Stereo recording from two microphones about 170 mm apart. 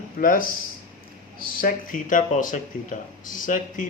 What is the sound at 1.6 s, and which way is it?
Speech, 55° left (ahead or behind).